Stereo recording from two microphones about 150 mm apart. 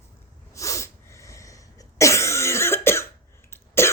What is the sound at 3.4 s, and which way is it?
Cough, 15° left (ahead or behind).